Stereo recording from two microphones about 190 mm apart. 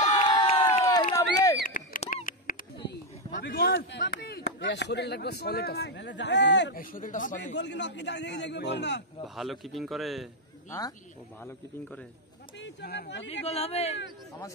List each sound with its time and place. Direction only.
0.3 s crowd: 25° left (ahead or behind)
1.1 s a sound: 15° left (ahead or behind)
1.7 s a sound: 40° left (ahead or behind)
3.3 s speech: 50° left (ahead or behind); by 6.8 s 65° left (ahead or behind)
6.8 s speech: 45° left (ahead or behind)
7.5 s a man's voice: 65° left (ahead or behind)
9.3 s speech: centre (ahead or behind)
12.5 s speech: 65° left (ahead or behind)
13.3 s speech: 30° left (ahead or behind)